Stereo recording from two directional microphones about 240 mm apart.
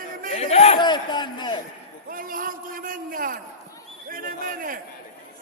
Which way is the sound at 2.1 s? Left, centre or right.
Right.